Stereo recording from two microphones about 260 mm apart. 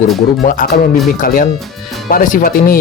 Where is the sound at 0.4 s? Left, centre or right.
Left.